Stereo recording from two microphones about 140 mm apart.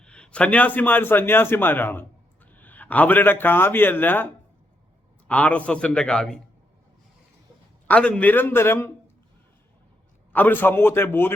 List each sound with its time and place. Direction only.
0.0 s a man's voice: 5° left (ahead or behind)
5.3 s a man's voice: 10° left (ahead or behind)
7.9 s a man's voice: 10° left (ahead or behind)
10.3 s a man's voice: 15° left (ahead or behind)